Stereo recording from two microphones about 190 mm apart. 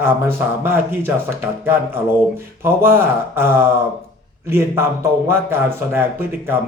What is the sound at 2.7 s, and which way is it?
Speech, 10° right (ahead or behind).